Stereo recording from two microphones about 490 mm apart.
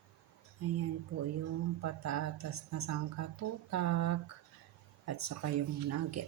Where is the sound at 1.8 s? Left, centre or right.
Right.